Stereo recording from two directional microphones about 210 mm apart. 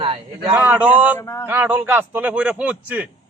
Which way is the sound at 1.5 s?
10° right (ahead or behind).